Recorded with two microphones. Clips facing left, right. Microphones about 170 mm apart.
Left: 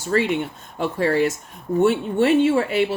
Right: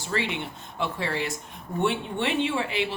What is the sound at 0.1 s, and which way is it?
Speech, 45° left (ahead or behind).